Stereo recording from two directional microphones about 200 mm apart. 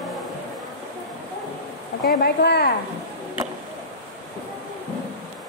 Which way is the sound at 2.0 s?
55° left (ahead or behind).